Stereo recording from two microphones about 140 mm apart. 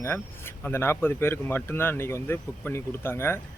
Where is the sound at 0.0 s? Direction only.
15° left (ahead or behind).